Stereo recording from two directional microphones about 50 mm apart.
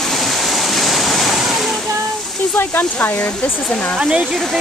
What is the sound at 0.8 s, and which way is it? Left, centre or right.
Waves, centre.